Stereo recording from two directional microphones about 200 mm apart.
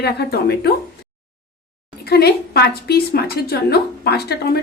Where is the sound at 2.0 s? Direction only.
55° left (ahead or behind).